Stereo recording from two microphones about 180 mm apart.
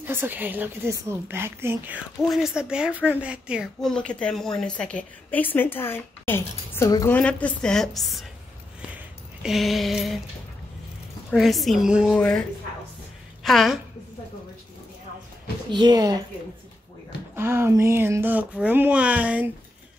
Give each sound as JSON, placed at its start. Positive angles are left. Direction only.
{"t": 0.0, "sound": "a woman's voice", "side_deg": -10}
{"t": 7.2, "sound": "a woman's voice", "side_deg": 5}
{"t": 9.4, "sound": "a woman's voice", "side_deg": 0}
{"t": 11.2, "sound": "a woman's voice", "side_deg": 0}
{"t": 15.7, "sound": "speech", "side_deg": -25}
{"t": 17.4, "sound": "speech", "side_deg": -15}